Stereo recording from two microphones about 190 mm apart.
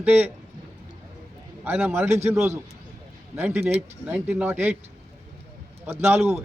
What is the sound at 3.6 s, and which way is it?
Speech, 35° right (ahead or behind).